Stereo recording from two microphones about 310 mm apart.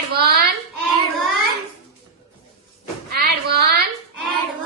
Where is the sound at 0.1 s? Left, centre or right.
Right.